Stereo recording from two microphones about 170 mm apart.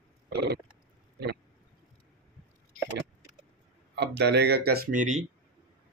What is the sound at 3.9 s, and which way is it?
Speech, 85° right.